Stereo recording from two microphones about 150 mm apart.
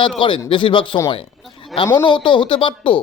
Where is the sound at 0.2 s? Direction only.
35° left (ahead or behind).